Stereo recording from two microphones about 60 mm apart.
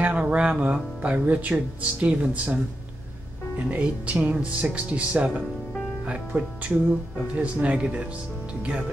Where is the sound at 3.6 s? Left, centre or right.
Right.